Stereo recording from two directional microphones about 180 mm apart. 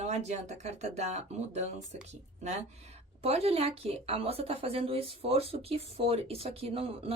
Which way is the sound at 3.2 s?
35° right (ahead or behind).